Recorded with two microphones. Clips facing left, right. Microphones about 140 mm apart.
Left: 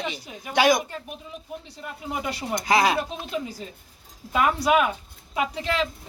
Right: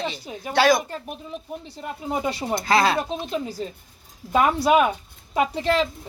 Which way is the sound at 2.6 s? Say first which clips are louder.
Right 1 dB; 15° left (ahead or behind).